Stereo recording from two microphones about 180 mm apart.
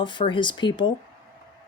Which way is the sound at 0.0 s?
25° left (ahead or behind).